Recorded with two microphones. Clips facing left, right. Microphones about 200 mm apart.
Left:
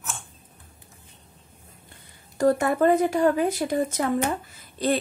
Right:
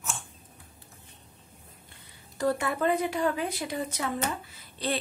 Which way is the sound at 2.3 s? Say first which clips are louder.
Left 7 dB; 45° left (ahead or behind).